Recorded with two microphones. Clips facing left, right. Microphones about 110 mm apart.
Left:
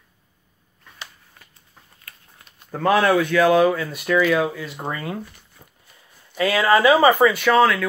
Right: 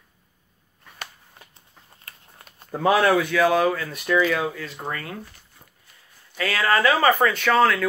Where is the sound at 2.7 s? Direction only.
5° right (ahead or behind); by 5.1 s 20° left (ahead or behind).